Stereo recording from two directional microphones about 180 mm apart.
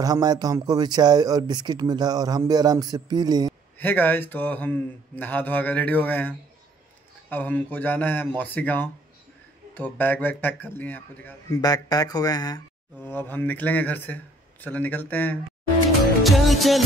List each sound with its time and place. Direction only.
0.0 s speech: 20° right (ahead or behind)
3.7 s speech: 10° left (ahead or behind)
11.6 s speech: 20° left (ahead or behind)
13.0 s speech: 10° left (ahead or behind)
16.2 s music: centre (ahead or behind)